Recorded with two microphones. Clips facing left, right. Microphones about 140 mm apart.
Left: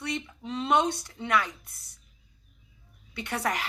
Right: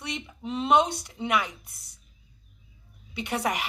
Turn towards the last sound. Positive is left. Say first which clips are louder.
# right 2 dB
turn(degrees=-15)  # may be behind; listen again after turning